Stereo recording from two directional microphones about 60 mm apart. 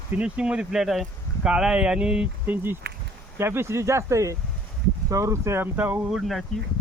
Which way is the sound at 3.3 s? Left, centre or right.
Right.